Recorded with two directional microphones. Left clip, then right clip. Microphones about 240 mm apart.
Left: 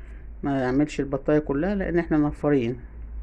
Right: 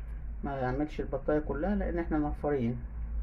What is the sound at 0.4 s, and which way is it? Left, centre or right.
Speech, left.